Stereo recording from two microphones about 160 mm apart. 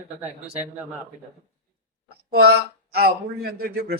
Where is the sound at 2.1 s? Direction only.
85° right.